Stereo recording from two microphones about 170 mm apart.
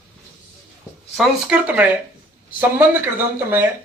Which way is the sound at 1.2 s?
5° right (ahead or behind).